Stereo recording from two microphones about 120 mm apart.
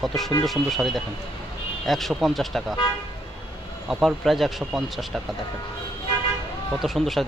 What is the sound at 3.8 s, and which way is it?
Speech, centre (ahead or behind).